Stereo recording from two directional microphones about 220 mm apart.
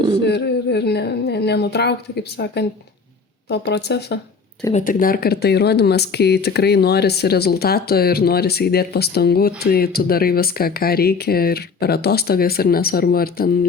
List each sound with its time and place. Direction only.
0.3 s speech: 50° left (ahead or behind)
4.7 s speech: 40° left (ahead or behind)